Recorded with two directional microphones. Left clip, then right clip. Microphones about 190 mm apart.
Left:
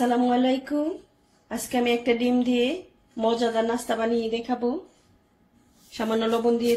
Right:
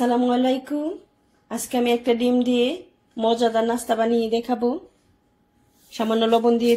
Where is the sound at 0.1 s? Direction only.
25° right (ahead or behind).